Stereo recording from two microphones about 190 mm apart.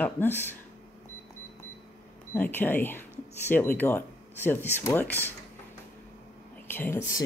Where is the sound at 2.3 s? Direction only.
10° left (ahead or behind).